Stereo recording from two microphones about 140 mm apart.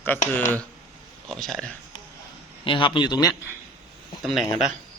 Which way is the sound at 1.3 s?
Centre (ahead or behind).